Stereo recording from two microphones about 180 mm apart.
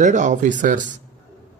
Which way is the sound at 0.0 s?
40° right (ahead or behind).